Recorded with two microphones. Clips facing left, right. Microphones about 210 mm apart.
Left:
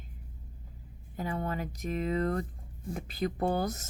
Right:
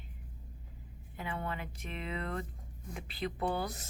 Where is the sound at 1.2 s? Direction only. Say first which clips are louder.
Left 5 dB; 40° left (ahead or behind).